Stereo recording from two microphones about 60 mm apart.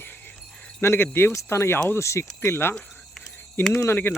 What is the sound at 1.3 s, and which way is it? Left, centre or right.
Speech, left.